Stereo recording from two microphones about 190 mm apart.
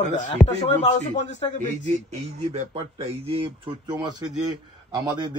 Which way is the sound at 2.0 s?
35° right (ahead or behind).